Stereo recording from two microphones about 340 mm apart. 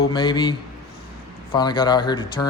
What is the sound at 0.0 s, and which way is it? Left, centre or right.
Speech, centre.